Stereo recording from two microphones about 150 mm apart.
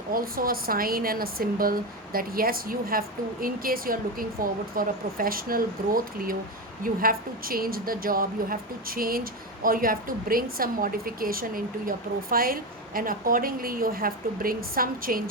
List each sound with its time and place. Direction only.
0.1 s a woman's voice: 75° right (ahead or behind)